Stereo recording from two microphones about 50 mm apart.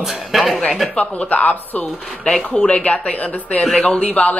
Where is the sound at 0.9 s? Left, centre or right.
Left.